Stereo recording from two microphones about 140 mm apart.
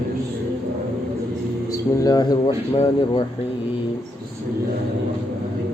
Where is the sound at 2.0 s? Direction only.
25° left (ahead or behind).